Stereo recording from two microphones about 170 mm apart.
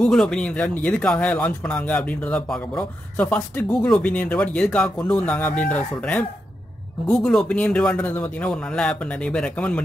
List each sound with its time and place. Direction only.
0.0 s speech: 5° left (ahead or behind)